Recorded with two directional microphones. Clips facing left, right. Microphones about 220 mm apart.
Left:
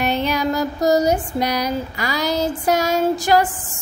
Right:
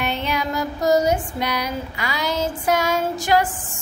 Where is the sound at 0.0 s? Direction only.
40° left (ahead or behind).